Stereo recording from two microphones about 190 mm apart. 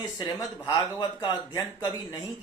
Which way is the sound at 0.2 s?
20° left (ahead or behind).